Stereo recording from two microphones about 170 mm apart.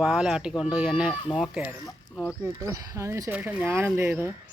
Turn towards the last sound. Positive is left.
turn(degrees=-15)  # may be behind; listen again after turning